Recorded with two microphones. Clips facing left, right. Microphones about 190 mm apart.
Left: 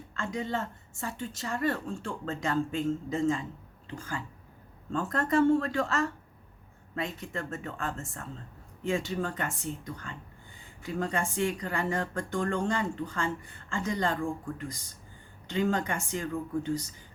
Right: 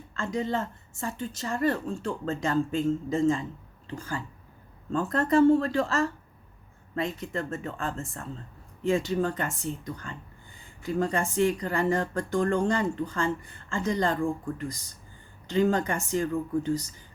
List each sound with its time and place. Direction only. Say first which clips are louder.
0.2 s speech: right 4 dB; 35° right (ahead or behind)